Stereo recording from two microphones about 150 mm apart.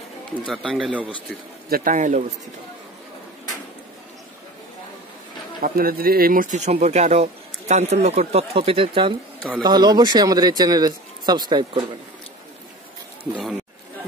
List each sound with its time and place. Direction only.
0.5 s speech: centre (ahead or behind)
1.7 s a man's voice: 60° right (ahead or behind)
5.6 s speech: 75° right (ahead or behind); by 11.8 s 30° right (ahead or behind)
13.3 s speech: 5° right (ahead or behind)